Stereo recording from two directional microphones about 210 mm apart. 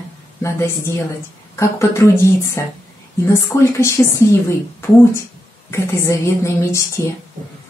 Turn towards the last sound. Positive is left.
turn(degrees=15)  # may be behind; listen again after turning